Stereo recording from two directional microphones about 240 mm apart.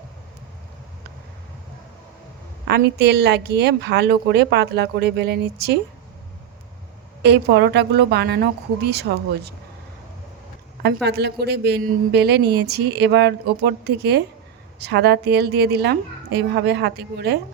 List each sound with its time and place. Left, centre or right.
2.6 s a woman's voice: right
7.2 s a woman's voice: right
10.8 s a woman's voice: right